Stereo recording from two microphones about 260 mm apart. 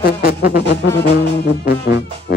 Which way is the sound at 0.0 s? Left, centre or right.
Left.